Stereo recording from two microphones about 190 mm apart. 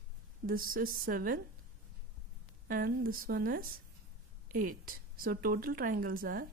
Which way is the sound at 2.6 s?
50° right (ahead or behind).